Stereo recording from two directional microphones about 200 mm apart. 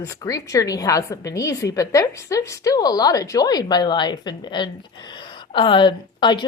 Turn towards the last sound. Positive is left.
turn(degrees=25)  # may be behind; listen again after turning